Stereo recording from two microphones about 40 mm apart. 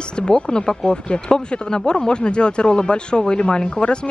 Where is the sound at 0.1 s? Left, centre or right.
Left.